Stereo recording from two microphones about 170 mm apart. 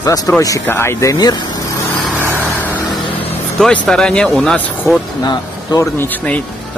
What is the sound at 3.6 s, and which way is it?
Speech, 5° left (ahead or behind).